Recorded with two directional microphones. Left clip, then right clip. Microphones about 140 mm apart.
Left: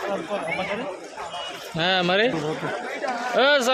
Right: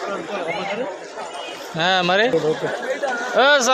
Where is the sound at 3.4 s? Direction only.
10° left (ahead or behind).